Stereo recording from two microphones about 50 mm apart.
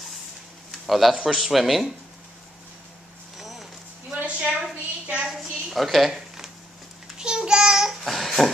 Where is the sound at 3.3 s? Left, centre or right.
Centre.